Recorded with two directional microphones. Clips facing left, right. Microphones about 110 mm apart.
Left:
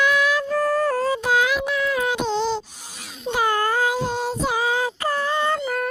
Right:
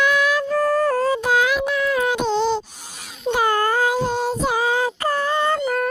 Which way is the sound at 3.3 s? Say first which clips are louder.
Right 2 dB; 50° right (ahead or behind).